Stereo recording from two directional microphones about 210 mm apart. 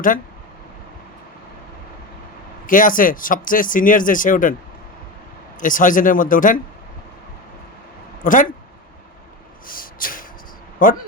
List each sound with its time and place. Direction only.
2.6 s speech: 40° left (ahead or behind)
5.5 s speech: 40° left (ahead or behind)
8.2 s speech: 40° left (ahead or behind)
9.6 s a sound: 40° left (ahead or behind)
10.8 s speech: 40° left (ahead or behind)